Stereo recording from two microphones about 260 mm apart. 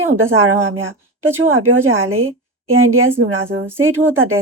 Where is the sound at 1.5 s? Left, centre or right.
Right.